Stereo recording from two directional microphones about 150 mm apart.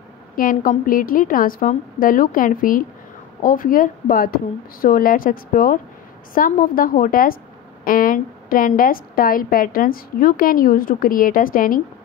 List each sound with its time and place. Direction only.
0.4 s a woman's voice: 65° left (ahead or behind)